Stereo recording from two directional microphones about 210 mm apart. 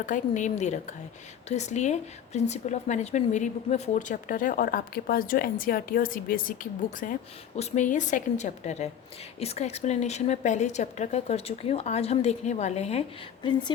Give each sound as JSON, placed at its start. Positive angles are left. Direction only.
{"t": 0.0, "sound": "a woman's voice", "side_deg": 35}